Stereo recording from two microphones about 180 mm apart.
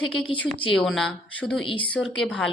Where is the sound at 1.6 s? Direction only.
30° left (ahead or behind).